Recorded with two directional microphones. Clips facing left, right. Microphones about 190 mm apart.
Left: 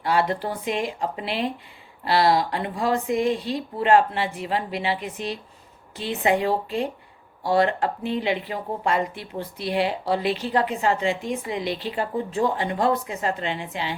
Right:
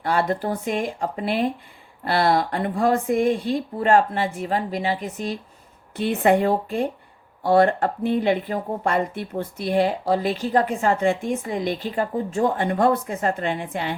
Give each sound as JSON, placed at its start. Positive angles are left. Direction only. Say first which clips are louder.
{"t": 0.0, "sound": "speech", "louder": "right 1 dB", "side_deg": -50}
{"t": 6.0, "sound": "speech", "louder": "right 4 dB", "side_deg": -55}